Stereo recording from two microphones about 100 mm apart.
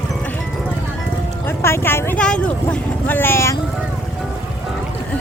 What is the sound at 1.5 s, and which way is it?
Music, 25° left (ahead or behind).